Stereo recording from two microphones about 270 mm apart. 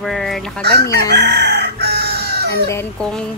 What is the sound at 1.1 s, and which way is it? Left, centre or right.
Chicken, right.